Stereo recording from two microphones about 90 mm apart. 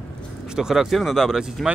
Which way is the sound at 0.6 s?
5° right (ahead or behind).